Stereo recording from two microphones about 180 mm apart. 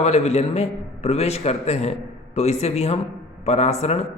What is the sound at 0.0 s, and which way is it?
A man's voice, 35° left (ahead or behind).